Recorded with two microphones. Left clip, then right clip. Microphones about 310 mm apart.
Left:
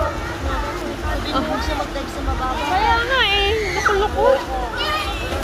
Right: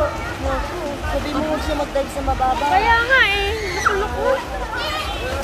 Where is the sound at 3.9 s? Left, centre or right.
Left.